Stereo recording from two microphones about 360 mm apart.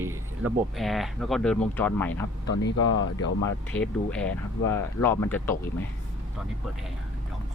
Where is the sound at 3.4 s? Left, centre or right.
Centre.